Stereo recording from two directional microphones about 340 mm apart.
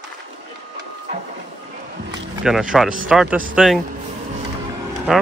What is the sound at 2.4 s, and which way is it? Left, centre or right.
Speech, centre.